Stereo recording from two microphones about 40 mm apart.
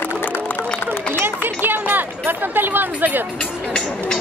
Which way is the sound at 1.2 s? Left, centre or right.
Right.